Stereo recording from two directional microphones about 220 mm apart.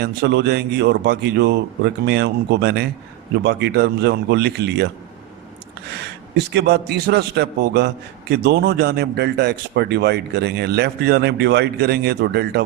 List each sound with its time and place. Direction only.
0.0 s a man's voice: 50° right (ahead or behind)
5.9 s a man's voice: 50° right (ahead or behind)